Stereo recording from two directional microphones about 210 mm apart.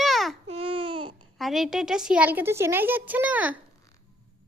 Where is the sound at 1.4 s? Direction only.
Centre (ahead or behind).